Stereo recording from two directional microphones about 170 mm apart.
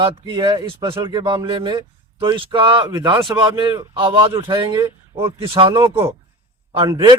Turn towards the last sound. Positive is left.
turn(degrees=-25)  # may be behind; listen again after turning